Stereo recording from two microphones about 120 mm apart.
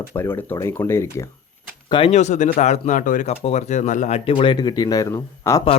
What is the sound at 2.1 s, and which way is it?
Speech, 85° left.